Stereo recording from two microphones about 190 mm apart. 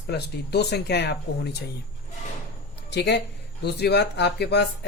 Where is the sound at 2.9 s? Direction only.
60° left (ahead or behind).